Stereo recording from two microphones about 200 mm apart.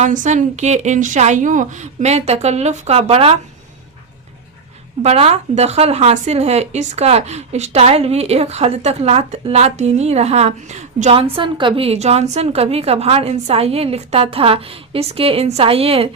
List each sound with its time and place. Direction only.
0.0 s speech: 40° right (ahead or behind)
5.0 s speech: 30° right (ahead or behind)